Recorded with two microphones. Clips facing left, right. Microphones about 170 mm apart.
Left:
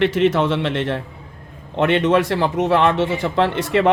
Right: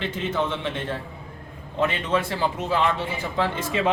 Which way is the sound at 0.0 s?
75° left (ahead or behind).